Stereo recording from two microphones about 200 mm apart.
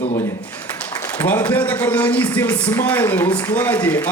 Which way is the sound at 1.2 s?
10° left (ahead or behind).